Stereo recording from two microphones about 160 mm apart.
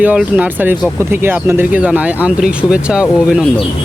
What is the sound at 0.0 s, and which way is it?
Speech, 10° right (ahead or behind).